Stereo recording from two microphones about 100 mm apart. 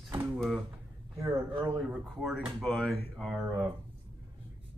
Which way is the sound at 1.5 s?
55° right (ahead or behind).